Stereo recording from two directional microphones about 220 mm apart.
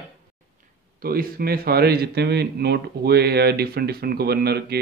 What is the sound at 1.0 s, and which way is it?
Speech, 40° right (ahead or behind).